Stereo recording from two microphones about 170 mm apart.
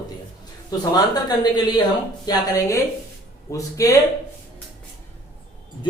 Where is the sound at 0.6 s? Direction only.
25° left (ahead or behind).